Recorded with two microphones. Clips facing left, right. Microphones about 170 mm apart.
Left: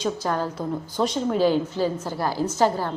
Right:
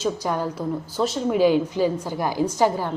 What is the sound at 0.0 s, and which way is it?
A woman's voice, 10° right (ahead or behind).